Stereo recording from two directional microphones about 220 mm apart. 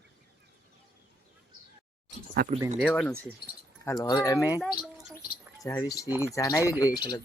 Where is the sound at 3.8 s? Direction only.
15° left (ahead or behind).